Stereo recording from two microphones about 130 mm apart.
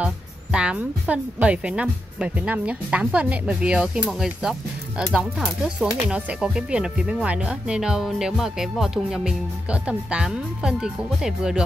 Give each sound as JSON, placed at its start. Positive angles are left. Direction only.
{"t": 0.0, "sound": "a woman's voice", "side_deg": -10}